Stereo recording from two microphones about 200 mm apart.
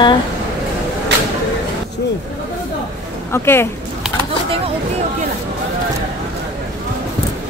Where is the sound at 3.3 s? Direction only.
10° left (ahead or behind).